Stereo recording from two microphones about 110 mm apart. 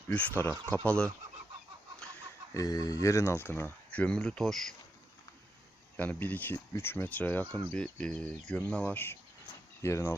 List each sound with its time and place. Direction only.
0.1 s speech: 15° left (ahead or behind)
2.5 s speech: 35° left (ahead or behind); by 4.6 s 5° left (ahead or behind)
6.0 s speech: 15° left (ahead or behind)